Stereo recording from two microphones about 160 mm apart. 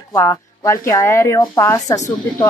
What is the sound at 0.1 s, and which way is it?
Speech, 15° left (ahead or behind).